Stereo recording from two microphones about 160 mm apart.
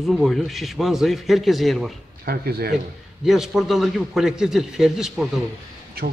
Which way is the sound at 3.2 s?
Centre (ahead or behind).